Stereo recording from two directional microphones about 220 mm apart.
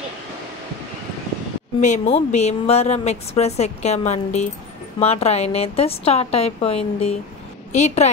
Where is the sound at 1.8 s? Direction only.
35° left (ahead or behind).